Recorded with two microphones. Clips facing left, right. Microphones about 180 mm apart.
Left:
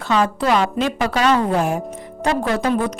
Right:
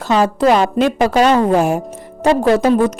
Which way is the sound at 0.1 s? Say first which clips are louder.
Right 5 dB; 40° right (ahead or behind).